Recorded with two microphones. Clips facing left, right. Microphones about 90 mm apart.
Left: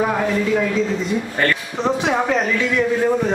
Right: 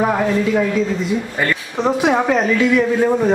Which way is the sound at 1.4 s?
10° right (ahead or behind).